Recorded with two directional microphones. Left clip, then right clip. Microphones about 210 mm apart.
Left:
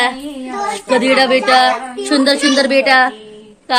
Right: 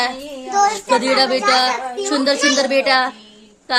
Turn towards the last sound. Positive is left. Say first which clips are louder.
# left 5 dB
turn(degrees=0)  # may be behind; listen again after turning